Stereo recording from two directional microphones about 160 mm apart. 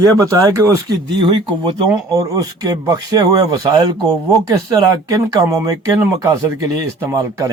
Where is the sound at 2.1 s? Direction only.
20° right (ahead or behind).